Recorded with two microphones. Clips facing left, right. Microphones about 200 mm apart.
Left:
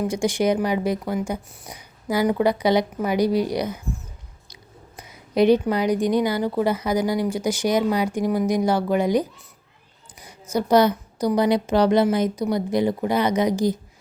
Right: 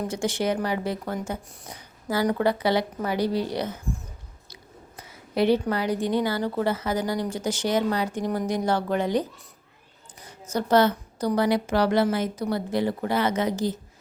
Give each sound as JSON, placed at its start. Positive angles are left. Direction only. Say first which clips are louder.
{"t": 0.1, "sound": "a woman's voice", "louder": "left 5 dB", "side_deg": 15}
{"t": 4.9, "sound": "a woman's voice", "louder": "left 5 dB", "side_deg": 15}